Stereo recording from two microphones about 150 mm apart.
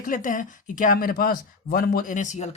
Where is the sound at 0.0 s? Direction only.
60° left (ahead or behind).